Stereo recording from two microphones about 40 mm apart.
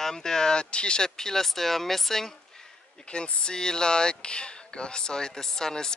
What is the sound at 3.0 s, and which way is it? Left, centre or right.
Speech, left.